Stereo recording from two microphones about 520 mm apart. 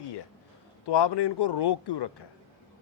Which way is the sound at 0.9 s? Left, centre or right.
Left.